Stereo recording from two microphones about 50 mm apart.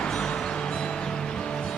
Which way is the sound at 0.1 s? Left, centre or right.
Centre.